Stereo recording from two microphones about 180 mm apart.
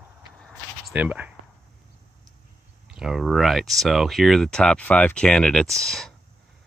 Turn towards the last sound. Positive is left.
turn(degrees=5)  # may be behind; listen again after turning